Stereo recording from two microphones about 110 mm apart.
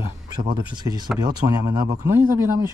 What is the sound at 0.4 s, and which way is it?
Speech, 40° right (ahead or behind).